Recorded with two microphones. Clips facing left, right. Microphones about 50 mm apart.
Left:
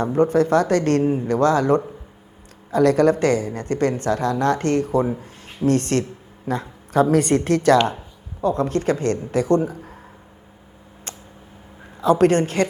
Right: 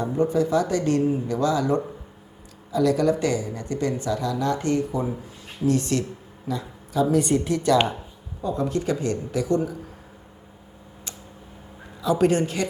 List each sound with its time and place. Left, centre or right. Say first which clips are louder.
0.1 s speech: left 5 dB; left
1.0 s a man's voice: left 3 dB; left
1.3 s a man's voice: left 9 dB; left
11.9 s speech: left 4 dB; left